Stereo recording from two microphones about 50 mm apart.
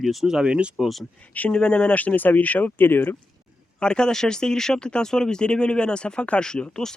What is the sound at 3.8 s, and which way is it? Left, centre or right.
Speech, centre.